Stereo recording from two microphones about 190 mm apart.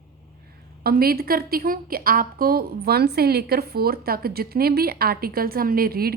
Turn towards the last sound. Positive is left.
turn(degrees=-50)  # may be behind; listen again after turning